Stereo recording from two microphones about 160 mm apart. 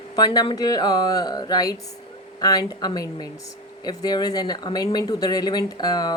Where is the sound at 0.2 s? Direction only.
30° left (ahead or behind).